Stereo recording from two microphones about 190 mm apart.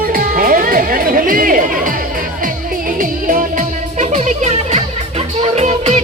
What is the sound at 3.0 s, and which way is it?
Music, 45° right (ahead or behind).